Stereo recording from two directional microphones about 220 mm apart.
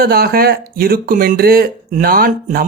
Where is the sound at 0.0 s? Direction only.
45° right (ahead or behind).